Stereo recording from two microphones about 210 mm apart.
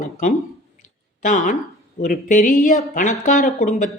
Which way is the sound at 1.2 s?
35° left (ahead or behind).